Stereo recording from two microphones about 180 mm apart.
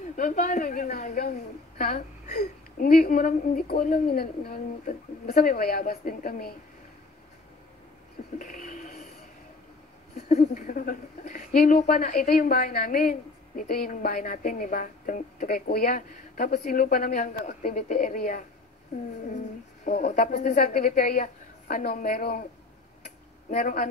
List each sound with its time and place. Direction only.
0.0 s speech: 45° left (ahead or behind)
8.4 s a sound: 50° left (ahead or behind)
10.2 s speech: 40° left (ahead or behind)
19.2 s a sound: 40° left (ahead or behind)
20.1 s speech: 45° left (ahead or behind)
23.5 s speech: 50° left (ahead or behind)